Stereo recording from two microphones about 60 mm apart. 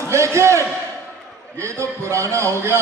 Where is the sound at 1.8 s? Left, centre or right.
Right.